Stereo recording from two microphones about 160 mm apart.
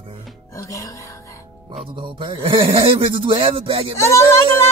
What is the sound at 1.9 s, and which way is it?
A man's voice, 30° right (ahead or behind).